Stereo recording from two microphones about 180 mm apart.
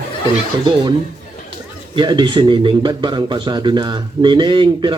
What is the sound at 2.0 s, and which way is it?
Speech, 25° right (ahead or behind).